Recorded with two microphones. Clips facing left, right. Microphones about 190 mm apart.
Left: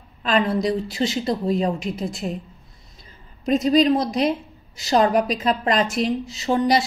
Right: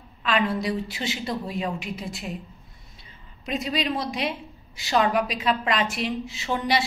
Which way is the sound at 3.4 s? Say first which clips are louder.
Left 10 dB; 40° left (ahead or behind).